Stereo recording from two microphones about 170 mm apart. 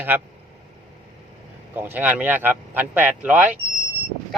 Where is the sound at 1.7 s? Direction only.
10° right (ahead or behind).